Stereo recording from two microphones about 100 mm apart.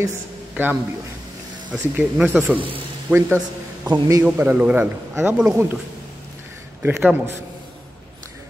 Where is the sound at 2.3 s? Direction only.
5° right (ahead or behind).